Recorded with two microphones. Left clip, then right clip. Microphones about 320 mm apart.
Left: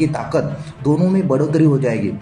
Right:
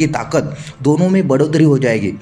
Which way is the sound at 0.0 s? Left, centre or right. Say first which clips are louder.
Right 2 dB; right.